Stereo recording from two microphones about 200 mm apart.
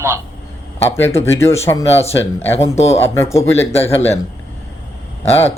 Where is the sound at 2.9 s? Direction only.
10° left (ahead or behind).